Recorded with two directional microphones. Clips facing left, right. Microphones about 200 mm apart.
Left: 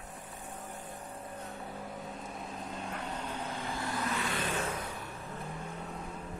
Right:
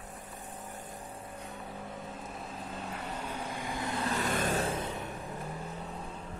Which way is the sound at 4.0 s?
45° right (ahead or behind).